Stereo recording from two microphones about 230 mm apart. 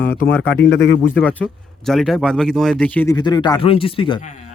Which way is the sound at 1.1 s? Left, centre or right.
Centre.